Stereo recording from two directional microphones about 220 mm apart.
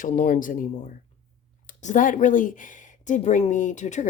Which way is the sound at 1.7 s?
35° left (ahead or behind).